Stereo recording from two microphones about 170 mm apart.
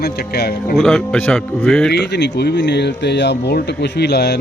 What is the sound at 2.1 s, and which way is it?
Speech, 80° left.